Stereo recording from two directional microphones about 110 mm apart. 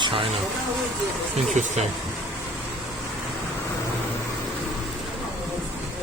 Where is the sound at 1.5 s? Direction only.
90° right.